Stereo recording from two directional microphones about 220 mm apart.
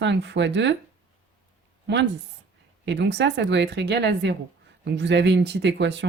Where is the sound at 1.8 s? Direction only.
55° right (ahead or behind).